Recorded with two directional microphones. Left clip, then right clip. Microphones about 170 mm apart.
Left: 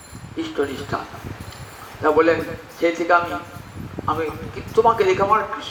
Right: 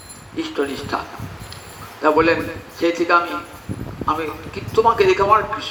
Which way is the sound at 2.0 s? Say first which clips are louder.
Right 1 dB; 30° right (ahead or behind).